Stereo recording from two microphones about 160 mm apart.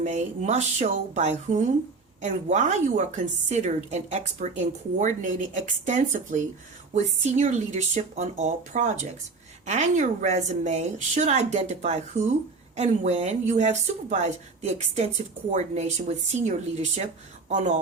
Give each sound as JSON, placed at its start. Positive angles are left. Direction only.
{"t": 0.0, "sound": "speech", "side_deg": -45}